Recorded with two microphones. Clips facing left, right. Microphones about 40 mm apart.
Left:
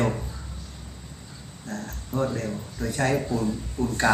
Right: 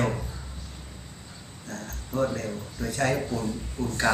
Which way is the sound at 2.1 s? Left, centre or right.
Centre.